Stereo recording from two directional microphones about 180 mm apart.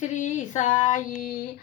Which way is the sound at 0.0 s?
40° left (ahead or behind).